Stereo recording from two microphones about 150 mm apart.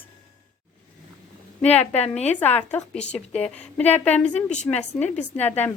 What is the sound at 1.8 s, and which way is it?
Speech, 45° left (ahead or behind).